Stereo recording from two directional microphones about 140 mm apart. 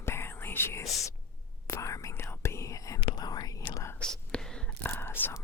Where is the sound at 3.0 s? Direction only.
35° left (ahead or behind).